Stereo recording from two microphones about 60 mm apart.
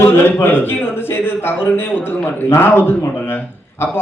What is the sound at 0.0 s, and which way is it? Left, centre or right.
A man's voice, left.